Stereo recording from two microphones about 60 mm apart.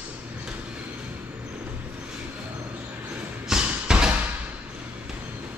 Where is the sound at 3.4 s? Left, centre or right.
Centre.